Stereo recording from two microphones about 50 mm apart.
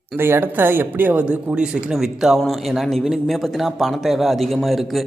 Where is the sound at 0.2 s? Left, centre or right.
Right.